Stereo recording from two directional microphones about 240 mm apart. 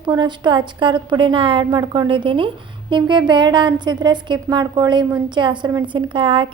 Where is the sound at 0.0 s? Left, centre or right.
Centre.